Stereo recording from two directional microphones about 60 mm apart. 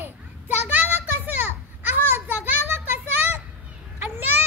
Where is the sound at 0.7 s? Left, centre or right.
Right.